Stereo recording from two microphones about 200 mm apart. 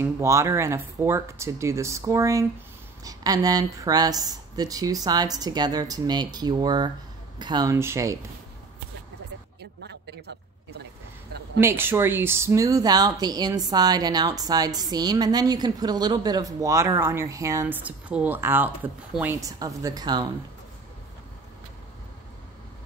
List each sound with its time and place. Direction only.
0.0 s speech: 15° right (ahead or behind)
9.6 s a sound: 55° right (ahead or behind)
11.6 s speech: 10° right (ahead or behind)